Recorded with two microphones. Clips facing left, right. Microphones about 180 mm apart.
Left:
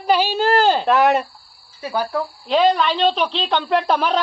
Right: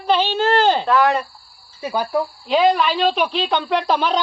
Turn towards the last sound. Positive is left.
turn(degrees=5)  # may be behind; listen again after turning